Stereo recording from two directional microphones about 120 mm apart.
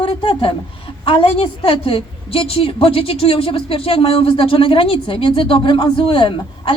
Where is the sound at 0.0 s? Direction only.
50° left (ahead or behind).